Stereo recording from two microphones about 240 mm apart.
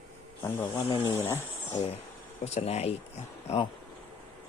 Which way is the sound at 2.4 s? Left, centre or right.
Left.